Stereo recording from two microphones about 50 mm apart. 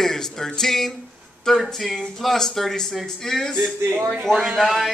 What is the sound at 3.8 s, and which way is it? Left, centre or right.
Speech, right.